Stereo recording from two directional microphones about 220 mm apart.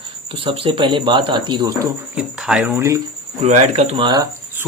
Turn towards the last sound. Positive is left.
turn(degrees=-15)  # may be behind; listen again after turning